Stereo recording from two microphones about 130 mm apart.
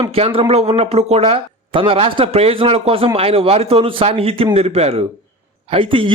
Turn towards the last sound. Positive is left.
turn(degrees=-45)  # may be behind; listen again after turning